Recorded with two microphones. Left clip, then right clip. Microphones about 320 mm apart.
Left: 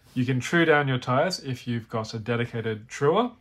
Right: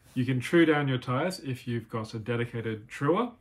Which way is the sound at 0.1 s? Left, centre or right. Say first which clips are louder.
Left 1 dB; centre.